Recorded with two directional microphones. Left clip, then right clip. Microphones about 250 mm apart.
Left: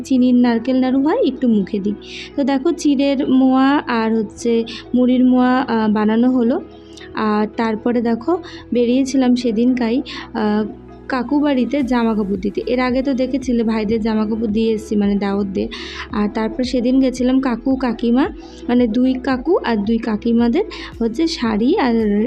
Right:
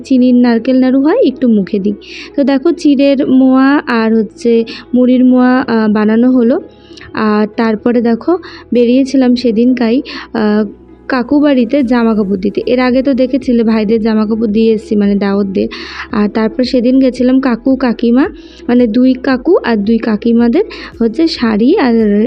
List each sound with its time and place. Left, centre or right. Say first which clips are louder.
0.1 s speech: right 6 dB; right